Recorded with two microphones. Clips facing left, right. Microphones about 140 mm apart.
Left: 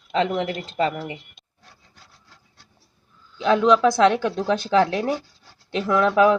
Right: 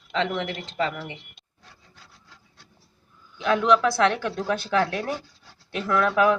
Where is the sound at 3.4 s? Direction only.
20° left (ahead or behind).